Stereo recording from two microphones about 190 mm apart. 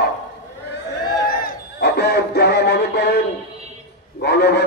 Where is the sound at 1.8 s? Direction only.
60° left (ahead or behind).